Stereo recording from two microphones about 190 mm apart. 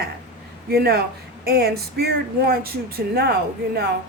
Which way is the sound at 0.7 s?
55° right (ahead or behind).